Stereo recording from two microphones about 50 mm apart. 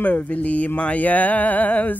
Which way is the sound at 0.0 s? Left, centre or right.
Left.